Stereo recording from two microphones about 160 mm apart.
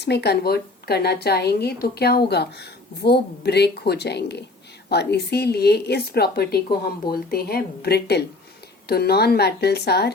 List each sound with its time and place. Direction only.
0.0 s a woman's voice: 90° left
8.9 s a woman's voice: 80° left